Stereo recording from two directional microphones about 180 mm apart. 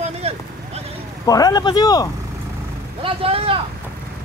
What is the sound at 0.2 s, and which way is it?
Vehicle, 35° right (ahead or behind).